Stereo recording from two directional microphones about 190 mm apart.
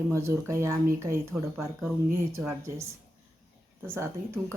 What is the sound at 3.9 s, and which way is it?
Speech, 15° right (ahead or behind).